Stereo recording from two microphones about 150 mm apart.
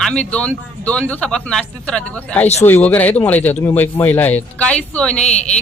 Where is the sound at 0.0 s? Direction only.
5° left (ahead or behind).